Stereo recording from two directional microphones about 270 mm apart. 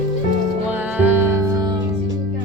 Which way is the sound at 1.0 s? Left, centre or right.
Centre.